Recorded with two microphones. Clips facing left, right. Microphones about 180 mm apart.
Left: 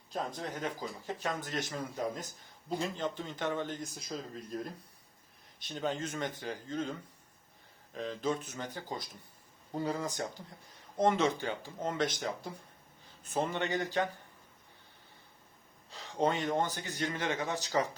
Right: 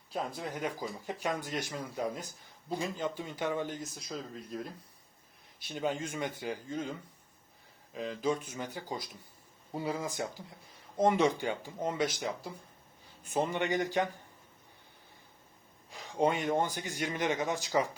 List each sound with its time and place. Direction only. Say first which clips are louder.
0.1 s speech: right 1 dB; 5° right (ahead or behind)
7.9 s speech: right 2 dB; 5° right (ahead or behind)
15.9 s speech: right 2 dB; 15° right (ahead or behind)